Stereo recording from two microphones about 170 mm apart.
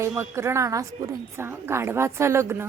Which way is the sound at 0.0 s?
15° right (ahead or behind).